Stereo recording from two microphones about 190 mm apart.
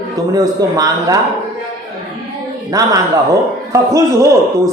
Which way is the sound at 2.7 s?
15° right (ahead or behind).